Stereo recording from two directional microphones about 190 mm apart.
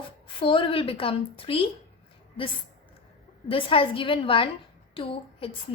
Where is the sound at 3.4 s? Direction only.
30° left (ahead or behind).